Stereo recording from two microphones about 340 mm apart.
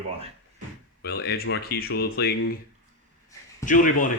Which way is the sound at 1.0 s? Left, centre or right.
Left.